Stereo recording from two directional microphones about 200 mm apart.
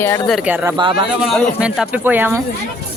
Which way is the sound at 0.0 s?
15° left (ahead or behind).